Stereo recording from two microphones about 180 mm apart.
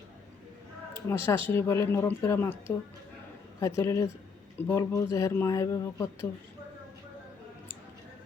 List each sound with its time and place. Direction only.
1.0 s speech: 15° left (ahead or behind)
3.8 s speech: 15° left (ahead or behind)